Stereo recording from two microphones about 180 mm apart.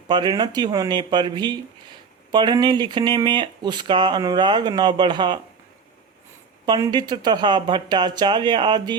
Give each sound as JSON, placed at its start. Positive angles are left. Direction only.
{"t": 0.1, "sound": "speech", "side_deg": -25}
{"t": 6.7, "sound": "speech", "side_deg": -20}